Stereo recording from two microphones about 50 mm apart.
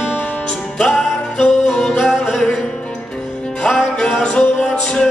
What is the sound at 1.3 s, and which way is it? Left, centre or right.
Music, centre.